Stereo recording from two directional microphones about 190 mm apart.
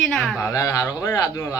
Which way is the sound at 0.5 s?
15° left (ahead or behind).